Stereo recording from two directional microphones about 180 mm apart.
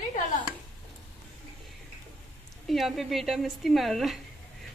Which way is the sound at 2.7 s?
Centre (ahead or behind).